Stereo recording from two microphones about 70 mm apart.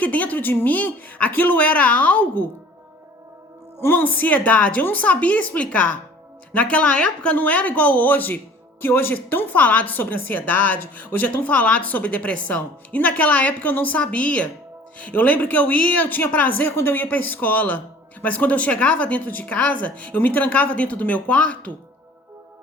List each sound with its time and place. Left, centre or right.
0.0 s a woman's voice: left
3.8 s a woman's voice: left